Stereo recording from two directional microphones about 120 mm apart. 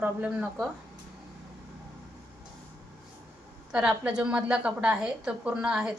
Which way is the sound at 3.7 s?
10° right (ahead or behind).